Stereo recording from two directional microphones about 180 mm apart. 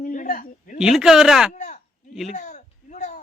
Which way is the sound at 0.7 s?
5° right (ahead or behind).